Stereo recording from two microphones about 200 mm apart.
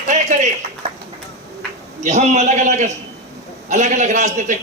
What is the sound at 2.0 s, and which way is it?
A man's voice, 35° right (ahead or behind).